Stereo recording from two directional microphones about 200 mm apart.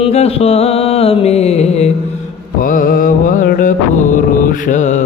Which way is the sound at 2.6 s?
40° left (ahead or behind).